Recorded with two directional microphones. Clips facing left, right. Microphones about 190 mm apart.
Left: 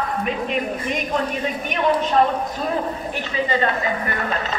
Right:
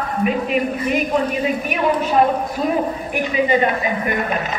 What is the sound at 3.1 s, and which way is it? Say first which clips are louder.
Speech: right 7 dB; 15° right (ahead or behind).